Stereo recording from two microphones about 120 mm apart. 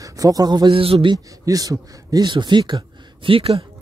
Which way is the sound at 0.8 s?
50° right (ahead or behind).